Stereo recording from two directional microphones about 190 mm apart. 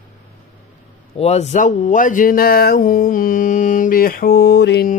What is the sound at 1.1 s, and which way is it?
Speech, 35° left (ahead or behind).